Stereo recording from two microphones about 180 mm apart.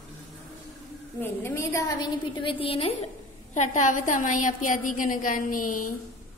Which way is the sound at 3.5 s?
45° left (ahead or behind).